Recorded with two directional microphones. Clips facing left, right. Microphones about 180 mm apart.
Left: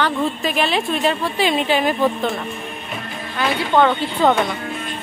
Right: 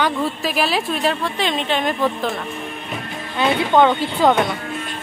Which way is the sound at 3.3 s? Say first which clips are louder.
Right 2 dB; 20° right (ahead or behind).